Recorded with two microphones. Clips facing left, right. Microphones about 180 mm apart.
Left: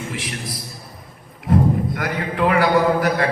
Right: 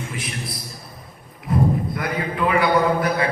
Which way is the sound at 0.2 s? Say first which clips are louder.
Left 1 dB; 90° left.